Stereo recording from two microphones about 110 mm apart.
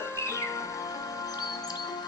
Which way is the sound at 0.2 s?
25° left (ahead or behind).